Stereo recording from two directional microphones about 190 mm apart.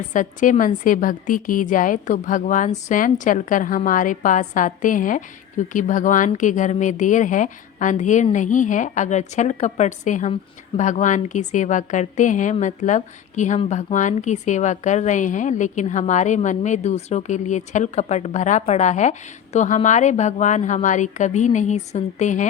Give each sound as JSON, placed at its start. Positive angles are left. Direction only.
{"t": 0.1, "sound": "a woman's voice", "side_deg": 40}